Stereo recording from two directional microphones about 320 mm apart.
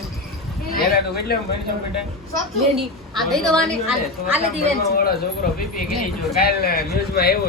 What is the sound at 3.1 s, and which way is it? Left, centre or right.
Speech, centre.